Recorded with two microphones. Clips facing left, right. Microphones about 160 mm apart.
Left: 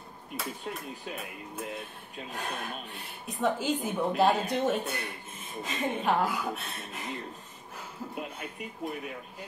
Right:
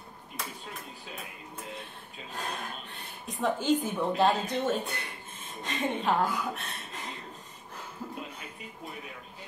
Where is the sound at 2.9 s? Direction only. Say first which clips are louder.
Even; centre (ahead or behind).